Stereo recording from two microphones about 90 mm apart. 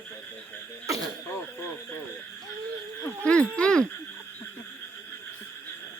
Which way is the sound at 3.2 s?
10° left (ahead or behind).